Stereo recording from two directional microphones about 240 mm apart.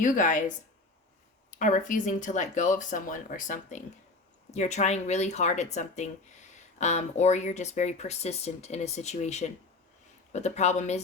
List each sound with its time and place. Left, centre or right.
0.0 s speech: left
6.7 s speech: left